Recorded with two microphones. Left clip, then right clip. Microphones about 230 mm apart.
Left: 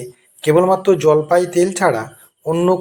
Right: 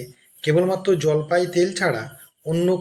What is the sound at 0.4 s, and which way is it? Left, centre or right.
Speech, centre.